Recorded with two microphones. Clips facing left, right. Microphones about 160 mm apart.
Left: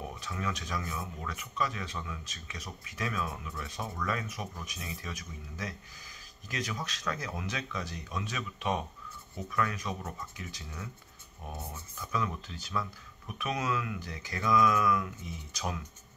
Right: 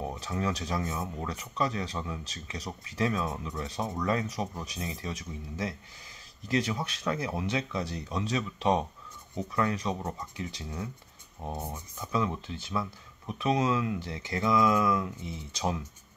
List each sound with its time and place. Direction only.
0.0 s speech: 35° right (ahead or behind)
11.4 s speech: 20° right (ahead or behind)